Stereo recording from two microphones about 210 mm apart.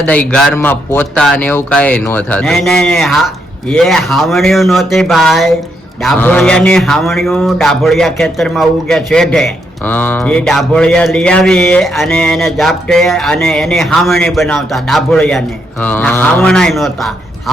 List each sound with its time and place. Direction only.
0.0 s speech: 5° left (ahead or behind)